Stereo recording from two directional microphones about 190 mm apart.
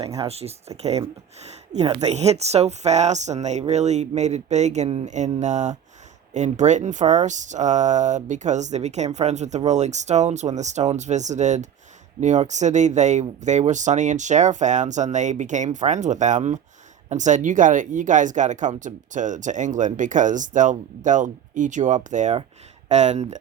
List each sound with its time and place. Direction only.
0.2 s speech: 35° right (ahead or behind)